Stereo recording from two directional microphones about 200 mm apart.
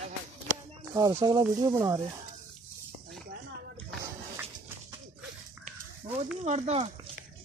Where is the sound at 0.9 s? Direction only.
20° right (ahead or behind).